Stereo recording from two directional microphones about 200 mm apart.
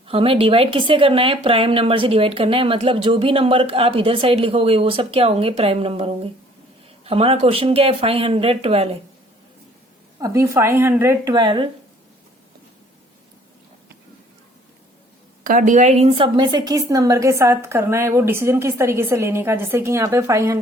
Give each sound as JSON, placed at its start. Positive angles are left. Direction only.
{"t": 0.1, "sound": "speech", "side_deg": -30}
{"t": 10.2, "sound": "a woman's voice", "side_deg": -15}
{"t": 15.4, "sound": "a woman's voice", "side_deg": -40}